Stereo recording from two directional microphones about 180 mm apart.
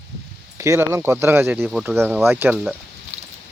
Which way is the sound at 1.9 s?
10° right (ahead or behind).